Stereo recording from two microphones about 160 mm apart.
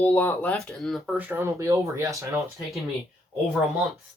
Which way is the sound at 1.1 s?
15° right (ahead or behind).